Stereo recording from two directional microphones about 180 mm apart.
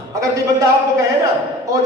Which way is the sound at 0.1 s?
20° right (ahead or behind).